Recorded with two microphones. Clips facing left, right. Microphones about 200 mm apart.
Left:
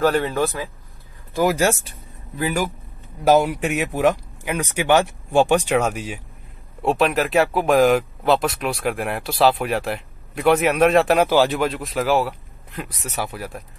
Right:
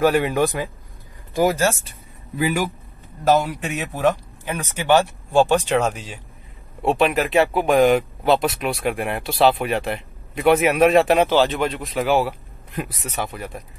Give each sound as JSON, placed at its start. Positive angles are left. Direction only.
{"t": 0.0, "sound": "speech", "side_deg": -15}
{"t": 1.9, "sound": "a sound", "side_deg": 0}
{"t": 3.3, "sound": "a man's voice", "side_deg": 15}
{"t": 6.8, "sound": "speech", "side_deg": 0}
{"t": 11.2, "sound": "speech", "side_deg": 10}